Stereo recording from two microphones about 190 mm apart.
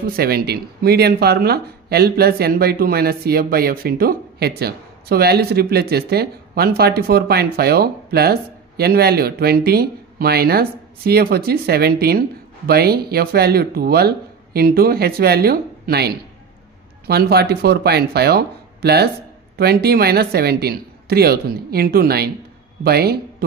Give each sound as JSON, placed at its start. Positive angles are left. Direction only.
{"t": 0.0, "sound": "speech", "side_deg": -55}
{"t": 17.1, "sound": "speech", "side_deg": -55}